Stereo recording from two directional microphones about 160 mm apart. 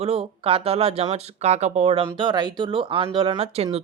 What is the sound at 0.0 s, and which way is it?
Speech, 35° right (ahead or behind).